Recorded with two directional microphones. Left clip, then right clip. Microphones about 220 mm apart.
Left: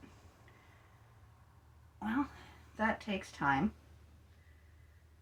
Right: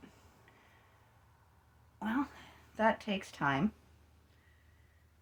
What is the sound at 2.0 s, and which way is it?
Speech, 50° right (ahead or behind).